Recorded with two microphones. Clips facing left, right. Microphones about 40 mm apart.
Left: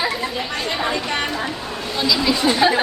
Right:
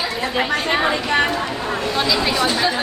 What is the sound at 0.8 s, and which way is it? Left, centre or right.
Speech, centre.